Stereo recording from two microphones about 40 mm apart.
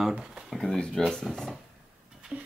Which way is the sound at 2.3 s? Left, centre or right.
Right.